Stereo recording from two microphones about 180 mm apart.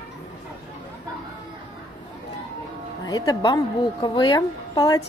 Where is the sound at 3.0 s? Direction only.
20° left (ahead or behind).